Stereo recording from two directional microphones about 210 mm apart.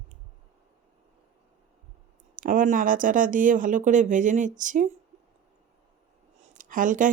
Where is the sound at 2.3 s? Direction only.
40° right (ahead or behind).